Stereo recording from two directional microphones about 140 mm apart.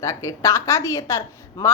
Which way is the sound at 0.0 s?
20° left (ahead or behind).